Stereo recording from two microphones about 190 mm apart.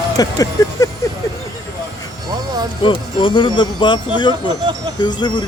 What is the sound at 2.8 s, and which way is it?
Speech, 25° left (ahead or behind).